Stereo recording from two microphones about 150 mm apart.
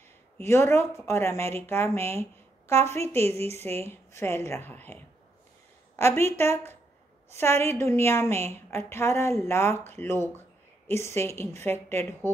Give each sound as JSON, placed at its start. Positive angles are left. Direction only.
{"t": 0.4, "sound": "a woman's voice", "side_deg": 15}
{"t": 3.3, "sound": "a woman's voice", "side_deg": -45}
{"t": 3.8, "sound": "a woman's voice", "side_deg": 15}
{"t": 5.9, "sound": "a woman's voice", "side_deg": 15}